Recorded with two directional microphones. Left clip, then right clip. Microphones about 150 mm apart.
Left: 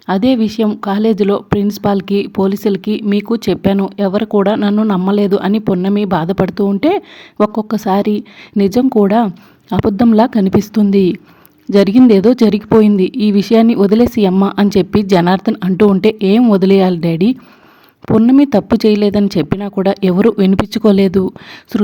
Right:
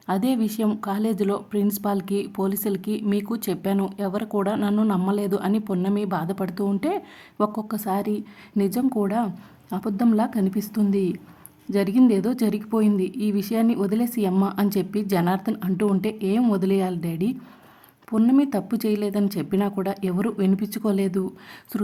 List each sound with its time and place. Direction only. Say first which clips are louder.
0.1 s speech: left 11 dB; 30° left (ahead or behind)